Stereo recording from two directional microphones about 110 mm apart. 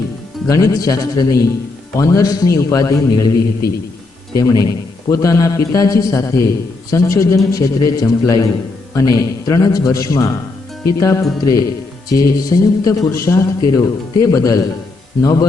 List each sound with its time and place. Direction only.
0.4 s a man's voice: 30° left (ahead or behind)
4.4 s a man's voice: 35° left (ahead or behind)
10.8 s music: 30° left (ahead or behind)
12.1 s a man's voice: 30° left (ahead or behind)